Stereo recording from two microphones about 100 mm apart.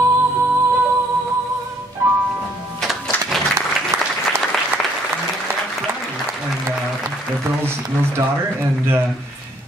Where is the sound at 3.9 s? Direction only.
30° right (ahead or behind).